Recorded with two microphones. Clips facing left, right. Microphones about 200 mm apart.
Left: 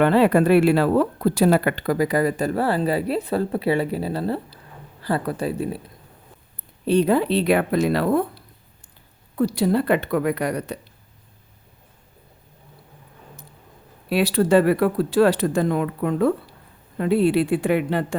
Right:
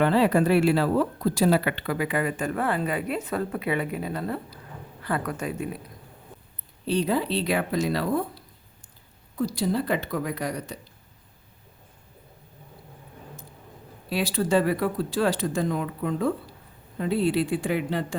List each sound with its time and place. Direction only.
0.0 s speech: 60° left (ahead or behind); by 5.8 s 30° left (ahead or behind)
6.8 s speech: 55° left (ahead or behind)
9.3 s speech: 60° left (ahead or behind)
14.1 s speech: 60° left (ahead or behind)